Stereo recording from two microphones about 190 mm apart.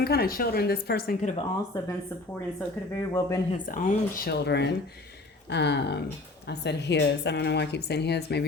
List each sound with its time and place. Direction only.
0.0 s a woman's voice: 55° left (ahead or behind)
1.2 s speech: 40° left (ahead or behind)
3.1 s speech: 15° left (ahead or behind)
3.5 s a woman's voice: 40° left (ahead or behind); by 8.4 s 60° left (ahead or behind)